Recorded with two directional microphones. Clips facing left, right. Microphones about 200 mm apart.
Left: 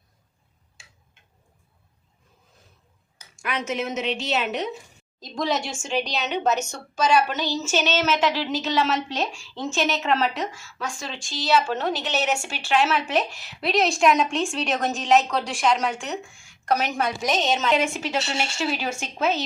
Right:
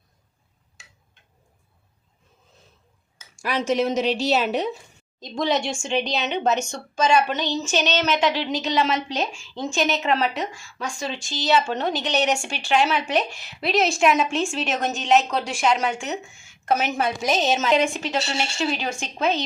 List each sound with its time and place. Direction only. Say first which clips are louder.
3.3 s a woman's voice: right 5 dB; 35° right (ahead or behind)
5.2 s speech: right 3 dB; centre (ahead or behind)